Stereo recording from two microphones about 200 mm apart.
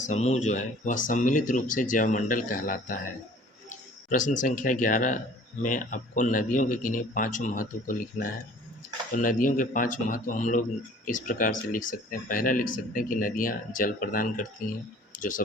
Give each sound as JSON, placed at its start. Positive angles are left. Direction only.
{"t": 0.0, "sound": "speech", "side_deg": 35}